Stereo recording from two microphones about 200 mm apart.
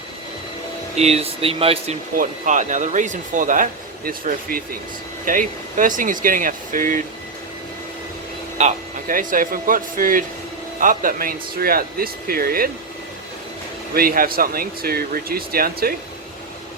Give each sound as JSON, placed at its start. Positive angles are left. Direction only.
{"t": 0.9, "sound": "speech", "side_deg": -30}
{"t": 8.5, "sound": "speech", "side_deg": -40}
{"t": 13.9, "sound": "speech", "side_deg": -45}